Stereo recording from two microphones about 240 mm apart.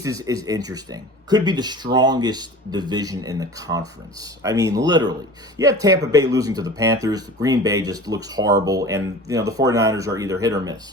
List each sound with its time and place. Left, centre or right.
0.0 s speech: centre